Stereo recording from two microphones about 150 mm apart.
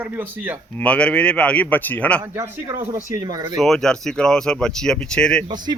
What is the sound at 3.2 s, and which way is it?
Speech, 25° right (ahead or behind).